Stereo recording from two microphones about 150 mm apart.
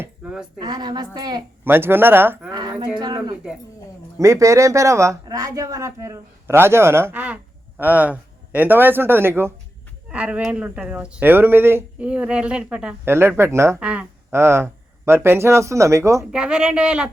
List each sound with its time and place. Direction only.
0.0 s a sound: 10° right (ahead or behind)
0.6 s speech: 30° right (ahead or behind)
1.6 s speech: 15° right (ahead or behind)
2.5 s a sound: 30° right (ahead or behind)
4.2 s speech: 20° right (ahead or behind)
13.7 s speech: 5° right (ahead or behind)
16.3 s speech: 5° right (ahead or behind)